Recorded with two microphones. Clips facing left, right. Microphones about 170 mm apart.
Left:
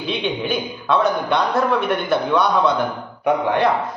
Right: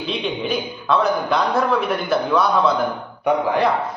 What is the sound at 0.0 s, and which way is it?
A man's voice, centre (ahead or behind).